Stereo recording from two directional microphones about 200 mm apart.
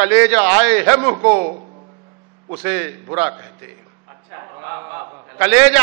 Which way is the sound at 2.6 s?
15° right (ahead or behind).